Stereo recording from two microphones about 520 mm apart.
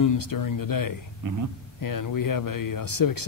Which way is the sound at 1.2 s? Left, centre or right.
Right.